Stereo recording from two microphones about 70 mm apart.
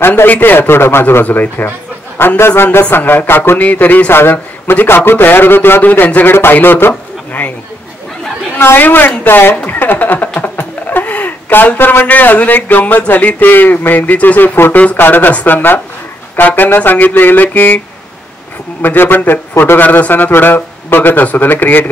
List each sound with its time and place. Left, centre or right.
0.0 s a man's voice: left
8.5 s a woman's voice: left